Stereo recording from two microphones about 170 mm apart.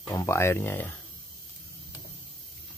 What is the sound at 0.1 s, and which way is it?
Speech, 20° left (ahead or behind).